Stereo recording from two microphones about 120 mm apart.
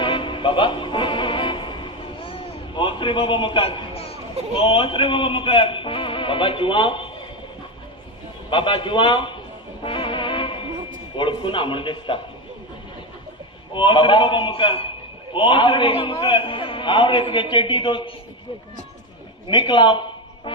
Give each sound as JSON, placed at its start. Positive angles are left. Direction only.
{"t": 0.0, "sound": "music", "side_deg": 45}
{"t": 8.4, "sound": "a man's voice", "side_deg": 45}
{"t": 9.8, "sound": "music", "side_deg": 45}
{"t": 11.1, "sound": "a man's voice", "side_deg": 45}
{"t": 13.7, "sound": "a man's voice", "side_deg": 45}
{"t": 19.5, "sound": "speech", "side_deg": 40}